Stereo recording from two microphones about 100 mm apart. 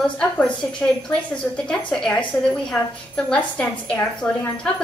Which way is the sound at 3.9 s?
20° left (ahead or behind).